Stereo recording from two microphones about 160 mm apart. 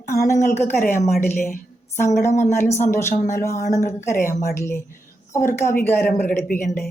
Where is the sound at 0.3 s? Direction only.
50° left (ahead or behind).